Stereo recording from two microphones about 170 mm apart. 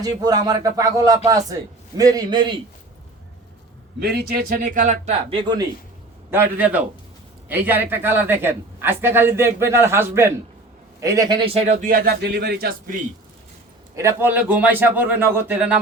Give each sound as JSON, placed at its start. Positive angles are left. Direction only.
{"t": 0.0, "sound": "speech", "side_deg": -25}
{"t": 4.0, "sound": "speech", "side_deg": -70}
{"t": 6.3, "sound": "speech", "side_deg": -10}
{"t": 11.4, "sound": "speech", "side_deg": -35}
{"t": 11.9, "sound": "speech", "side_deg": -65}
{"t": 13.9, "sound": "speech", "side_deg": -15}